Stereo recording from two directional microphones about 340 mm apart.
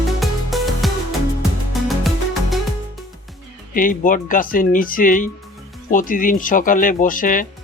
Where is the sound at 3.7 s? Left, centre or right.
Left.